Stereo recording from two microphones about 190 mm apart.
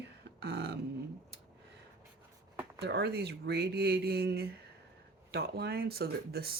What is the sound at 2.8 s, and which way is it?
Speech, 60° right (ahead or behind).